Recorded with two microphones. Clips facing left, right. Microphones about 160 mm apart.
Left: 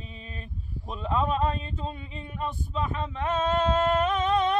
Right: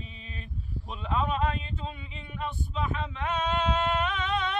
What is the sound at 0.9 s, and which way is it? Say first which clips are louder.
A man's voice: left 3 dB; 40° left (ahead or behind).